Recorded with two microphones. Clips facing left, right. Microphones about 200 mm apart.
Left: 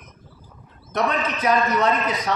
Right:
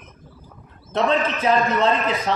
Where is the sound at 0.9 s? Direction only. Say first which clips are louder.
Right 3 dB; 30° right (ahead or behind).